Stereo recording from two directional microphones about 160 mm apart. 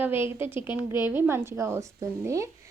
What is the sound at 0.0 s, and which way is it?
Speech, 15° right (ahead or behind).